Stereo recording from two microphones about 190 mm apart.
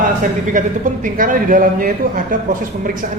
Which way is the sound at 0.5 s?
45° right (ahead or behind).